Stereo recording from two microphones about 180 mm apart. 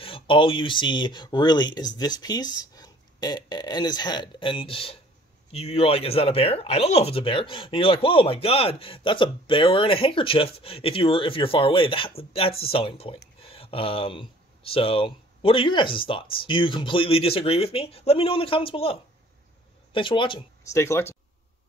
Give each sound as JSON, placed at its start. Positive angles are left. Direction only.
{"t": 0.0, "sound": "speech", "side_deg": 30}
{"t": 13.4, "sound": "a sound", "side_deg": 30}
{"t": 14.7, "sound": "speech", "side_deg": 30}
{"t": 20.7, "sound": "speech", "side_deg": 15}